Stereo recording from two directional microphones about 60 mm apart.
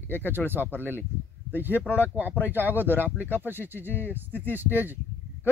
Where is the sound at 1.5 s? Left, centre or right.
Right.